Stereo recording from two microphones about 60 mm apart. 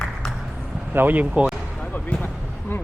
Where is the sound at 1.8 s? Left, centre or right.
Left.